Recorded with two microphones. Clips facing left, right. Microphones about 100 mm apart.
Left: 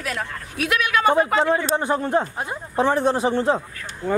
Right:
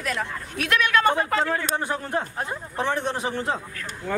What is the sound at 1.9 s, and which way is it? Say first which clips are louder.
Speech: left 6 dB; 35° left (ahead or behind).